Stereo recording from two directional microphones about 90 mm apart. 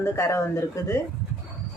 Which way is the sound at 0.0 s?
30° left (ahead or behind).